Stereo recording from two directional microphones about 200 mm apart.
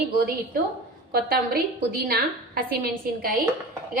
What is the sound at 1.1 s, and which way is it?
A woman's voice, 50° right (ahead or behind).